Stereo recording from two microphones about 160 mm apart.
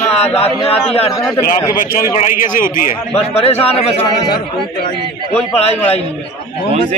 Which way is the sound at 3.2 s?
40° left (ahead or behind).